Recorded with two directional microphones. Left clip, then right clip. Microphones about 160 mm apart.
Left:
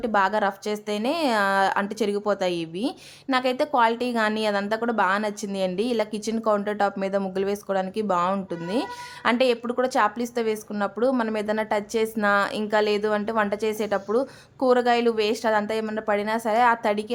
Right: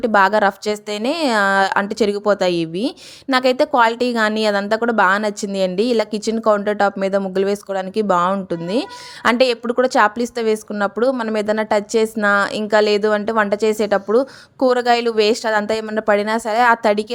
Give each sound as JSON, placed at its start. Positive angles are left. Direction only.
{"t": 0.0, "sound": "speech", "side_deg": -35}